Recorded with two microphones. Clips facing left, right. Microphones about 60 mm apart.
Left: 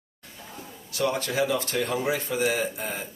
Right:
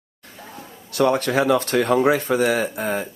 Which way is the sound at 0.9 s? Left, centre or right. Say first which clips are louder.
Right 7 dB; right.